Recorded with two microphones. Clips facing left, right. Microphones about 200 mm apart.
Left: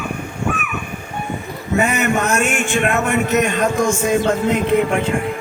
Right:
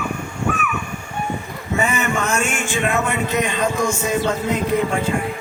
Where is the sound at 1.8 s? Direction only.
65° left (ahead or behind).